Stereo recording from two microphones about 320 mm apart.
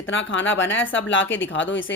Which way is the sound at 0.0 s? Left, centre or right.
Left.